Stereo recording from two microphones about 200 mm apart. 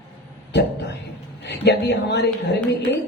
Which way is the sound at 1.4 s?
60° left (ahead or behind).